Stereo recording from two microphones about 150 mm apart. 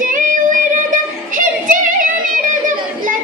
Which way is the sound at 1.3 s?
60° right (ahead or behind).